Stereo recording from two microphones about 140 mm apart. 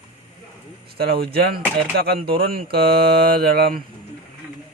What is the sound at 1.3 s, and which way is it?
Speech, 90° right.